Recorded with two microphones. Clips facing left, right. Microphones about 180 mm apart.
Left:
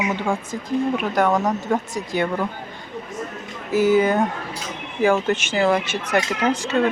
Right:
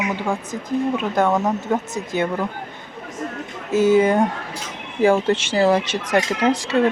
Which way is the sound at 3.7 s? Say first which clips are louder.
Right 2 dB; 25° right (ahead or behind).